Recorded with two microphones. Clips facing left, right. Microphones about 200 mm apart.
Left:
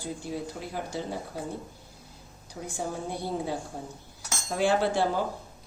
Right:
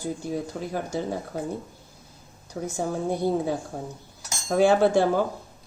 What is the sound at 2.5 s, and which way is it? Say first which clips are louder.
Speech: right 7 dB; 55° right (ahead or behind).